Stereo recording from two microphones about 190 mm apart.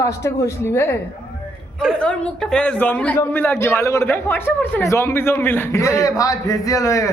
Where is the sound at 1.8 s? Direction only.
5° left (ahead or behind).